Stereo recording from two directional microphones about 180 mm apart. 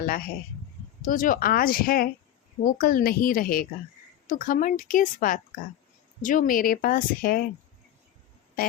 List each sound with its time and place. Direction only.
1.0 s speech: 50° left (ahead or behind)